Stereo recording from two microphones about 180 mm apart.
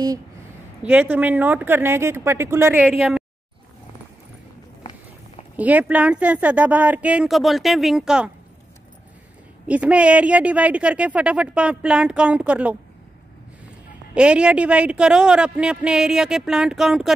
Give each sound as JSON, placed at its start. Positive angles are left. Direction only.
{"t": 0.8, "sound": "a woman's voice", "side_deg": -10}
{"t": 5.6, "sound": "a woman's voice", "side_deg": -10}
{"t": 9.7, "sound": "a woman's voice", "side_deg": -5}
{"t": 14.1, "sound": "a man's voice", "side_deg": -5}